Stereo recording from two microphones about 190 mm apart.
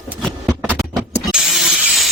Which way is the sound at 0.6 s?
10° right (ahead or behind).